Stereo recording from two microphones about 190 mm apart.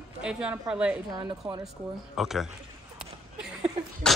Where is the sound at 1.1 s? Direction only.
20° right (ahead or behind).